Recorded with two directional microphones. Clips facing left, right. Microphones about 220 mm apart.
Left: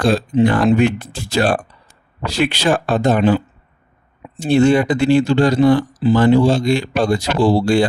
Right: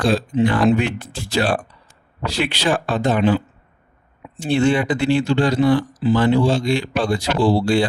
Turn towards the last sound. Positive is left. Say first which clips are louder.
# left 3 dB
turn(degrees=45)  # may be behind; listen again after turning